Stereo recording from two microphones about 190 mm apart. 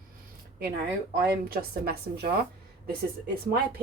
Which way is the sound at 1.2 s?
55° right (ahead or behind).